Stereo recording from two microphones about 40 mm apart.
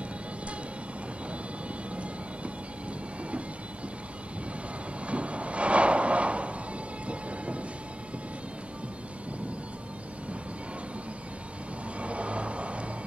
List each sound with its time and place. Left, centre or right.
5.0 s train: right
12.0 s vehicle: right